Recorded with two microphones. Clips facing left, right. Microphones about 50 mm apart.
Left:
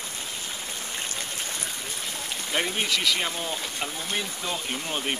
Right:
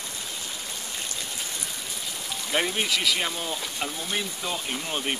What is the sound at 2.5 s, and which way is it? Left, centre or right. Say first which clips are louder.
Speech: right 1 dB; centre.